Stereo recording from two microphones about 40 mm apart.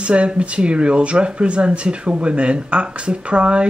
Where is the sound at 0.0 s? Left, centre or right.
Right.